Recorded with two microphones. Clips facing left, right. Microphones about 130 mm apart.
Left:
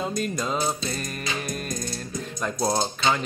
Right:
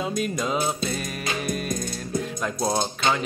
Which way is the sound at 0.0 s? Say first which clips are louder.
Right 1 dB; 5° right (ahead or behind).